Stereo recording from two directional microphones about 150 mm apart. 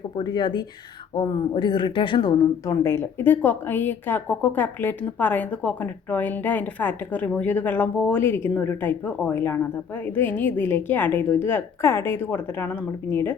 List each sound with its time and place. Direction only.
0.2 s speech: 30° left (ahead or behind)